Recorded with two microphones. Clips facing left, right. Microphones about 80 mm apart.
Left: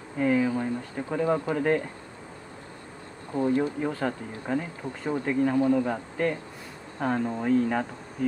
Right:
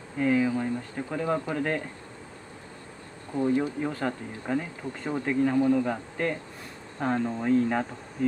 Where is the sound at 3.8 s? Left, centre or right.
Centre.